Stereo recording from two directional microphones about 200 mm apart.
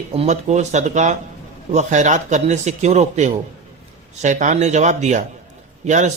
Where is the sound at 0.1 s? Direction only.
35° right (ahead or behind).